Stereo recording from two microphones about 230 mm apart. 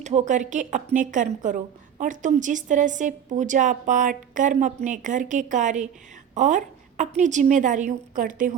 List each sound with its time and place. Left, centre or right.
0.0 s a woman's voice: right